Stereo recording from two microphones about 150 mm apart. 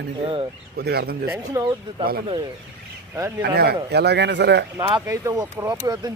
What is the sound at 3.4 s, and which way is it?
A man's voice, 90° right.